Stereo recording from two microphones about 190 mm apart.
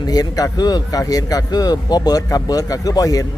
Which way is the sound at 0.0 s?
20° left (ahead or behind).